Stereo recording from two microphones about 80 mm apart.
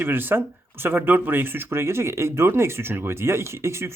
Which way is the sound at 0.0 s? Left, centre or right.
Right.